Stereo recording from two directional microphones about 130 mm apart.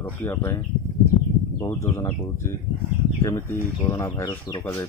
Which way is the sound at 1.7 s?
20° left (ahead or behind).